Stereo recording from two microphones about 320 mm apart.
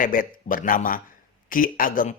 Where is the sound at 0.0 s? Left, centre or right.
Left.